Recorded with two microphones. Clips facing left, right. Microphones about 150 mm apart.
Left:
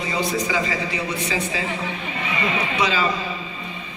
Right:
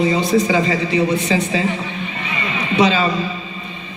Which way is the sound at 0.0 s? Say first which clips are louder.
Right 8 dB; 25° right (ahead or behind).